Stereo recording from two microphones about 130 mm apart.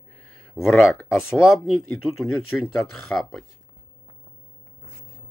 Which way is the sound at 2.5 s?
15° left (ahead or behind).